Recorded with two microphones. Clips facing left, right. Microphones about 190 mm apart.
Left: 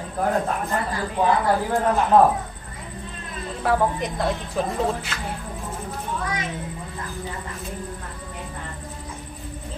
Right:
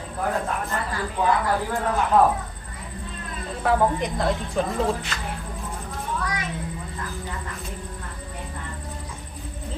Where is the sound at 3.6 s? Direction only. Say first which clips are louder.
Right 1 dB; centre (ahead or behind).